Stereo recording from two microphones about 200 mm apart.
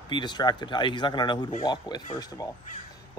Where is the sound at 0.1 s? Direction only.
20° left (ahead or behind).